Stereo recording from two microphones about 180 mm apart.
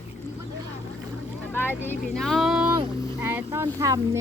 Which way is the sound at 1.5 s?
10° left (ahead or behind).